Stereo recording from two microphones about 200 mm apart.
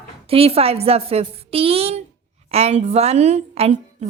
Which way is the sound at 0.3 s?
30° right (ahead or behind).